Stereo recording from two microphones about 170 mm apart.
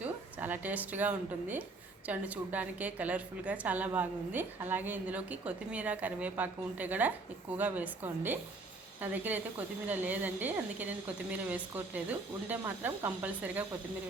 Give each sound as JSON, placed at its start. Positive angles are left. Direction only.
{"t": 0.0, "sound": "a woman's voice", "side_deg": -10}